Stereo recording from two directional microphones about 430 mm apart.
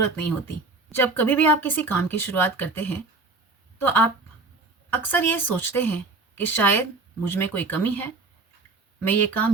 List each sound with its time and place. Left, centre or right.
0.0 s speech: left
0.9 s speech: centre
4.9 s speech: centre